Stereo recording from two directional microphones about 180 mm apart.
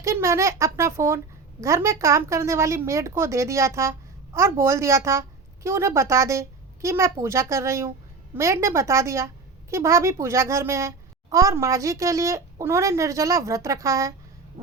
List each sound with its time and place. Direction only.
0.0 s a woman's voice: 15° right (ahead or behind)